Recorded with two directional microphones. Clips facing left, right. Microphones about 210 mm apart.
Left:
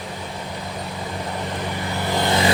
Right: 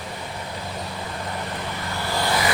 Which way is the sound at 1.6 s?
20° left (ahead or behind).